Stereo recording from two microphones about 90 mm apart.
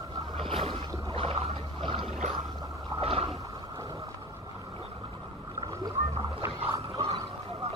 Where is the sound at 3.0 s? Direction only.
90° right.